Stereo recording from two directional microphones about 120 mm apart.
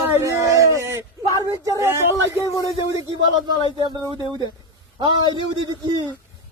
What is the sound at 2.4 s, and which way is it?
Speech, 35° left (ahead or behind).